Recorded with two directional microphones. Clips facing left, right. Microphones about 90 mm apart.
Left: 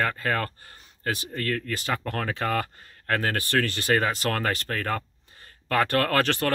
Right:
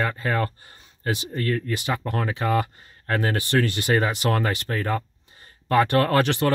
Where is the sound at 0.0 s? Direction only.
20° right (ahead or behind).